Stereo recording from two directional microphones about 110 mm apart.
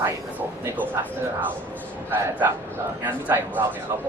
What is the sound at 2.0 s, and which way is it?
Speech, 20° right (ahead or behind).